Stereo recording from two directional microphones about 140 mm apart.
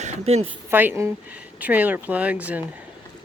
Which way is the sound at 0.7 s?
15° right (ahead or behind).